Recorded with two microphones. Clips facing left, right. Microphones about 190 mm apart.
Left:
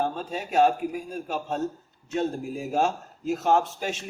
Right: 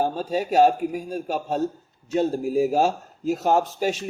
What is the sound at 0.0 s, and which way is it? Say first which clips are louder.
Speech: right 5 dB; 35° right (ahead or behind).